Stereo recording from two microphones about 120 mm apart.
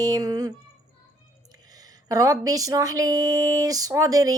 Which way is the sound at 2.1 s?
30° right (ahead or behind).